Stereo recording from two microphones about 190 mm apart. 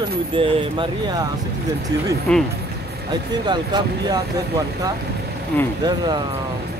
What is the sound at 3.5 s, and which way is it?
Speech, 20° right (ahead or behind).